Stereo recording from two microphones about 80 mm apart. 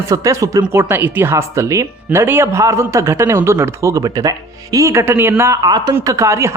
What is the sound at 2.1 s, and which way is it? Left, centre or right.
A man's voice, right.